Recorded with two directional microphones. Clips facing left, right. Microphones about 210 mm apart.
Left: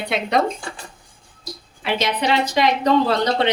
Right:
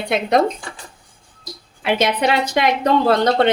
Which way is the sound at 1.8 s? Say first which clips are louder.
Right 4 dB; 55° right (ahead or behind).